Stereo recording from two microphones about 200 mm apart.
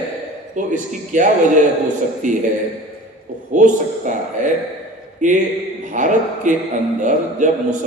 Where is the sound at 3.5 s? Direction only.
40° right (ahead or behind).